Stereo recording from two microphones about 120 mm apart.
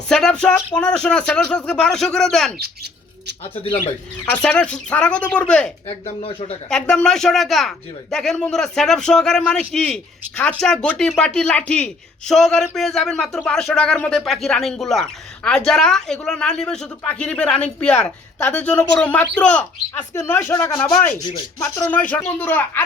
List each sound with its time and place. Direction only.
0.1 s speech: 5° left (ahead or behind)
4.3 s speech: 10° left (ahead or behind)
5.9 s speech: 55° left (ahead or behind)
6.7 s speech: 5° left (ahead or behind)